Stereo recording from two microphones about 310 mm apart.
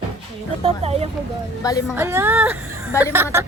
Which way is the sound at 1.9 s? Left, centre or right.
Centre.